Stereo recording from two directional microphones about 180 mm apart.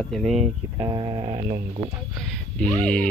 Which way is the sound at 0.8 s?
25° right (ahead or behind).